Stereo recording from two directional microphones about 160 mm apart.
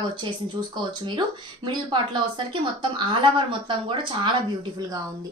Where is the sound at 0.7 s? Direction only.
30° right (ahead or behind).